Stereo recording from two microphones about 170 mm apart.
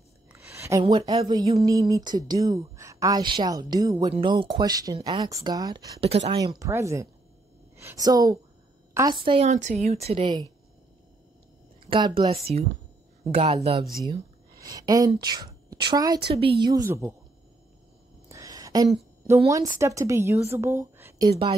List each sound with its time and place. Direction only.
0.3 s a sound: 15° right (ahead or behind)
1.2 s speech: 20° right (ahead or behind)
5.9 s speech: 35° right (ahead or behind)
6.4 s speech: 20° right (ahead or behind)
9.5 s speech: 45° right (ahead or behind)
11.9 s speech: 30° right (ahead or behind)
14.6 s a woman's voice: 20° right (ahead or behind)
18.3 s a sound: 20° right (ahead or behind)
19.2 s a woman's voice: 20° right (ahead or behind)